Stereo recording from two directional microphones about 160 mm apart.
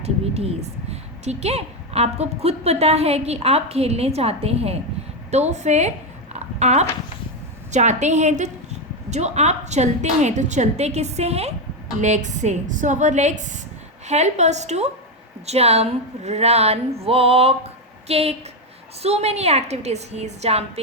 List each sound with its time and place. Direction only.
0.0 s a woman's voice: 40° right (ahead or behind)
6.3 s a sound: 45° right (ahead or behind)
7.7 s a woman's voice: 45° right (ahead or behind)